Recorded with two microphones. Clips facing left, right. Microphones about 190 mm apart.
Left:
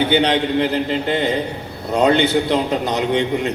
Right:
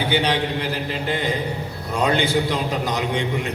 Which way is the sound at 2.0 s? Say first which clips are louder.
Left 4 dB; 65° left (ahead or behind).